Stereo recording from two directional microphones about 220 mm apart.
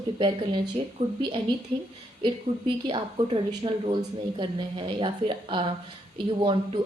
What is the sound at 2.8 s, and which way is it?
A woman's voice, 20° right (ahead or behind).